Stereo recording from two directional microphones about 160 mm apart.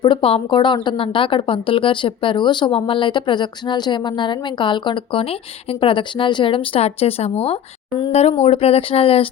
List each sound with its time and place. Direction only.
0.0 s a woman's voice: 35° left (ahead or behind)